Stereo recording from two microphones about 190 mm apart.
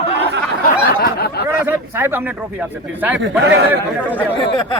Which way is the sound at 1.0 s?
55° left (ahead or behind).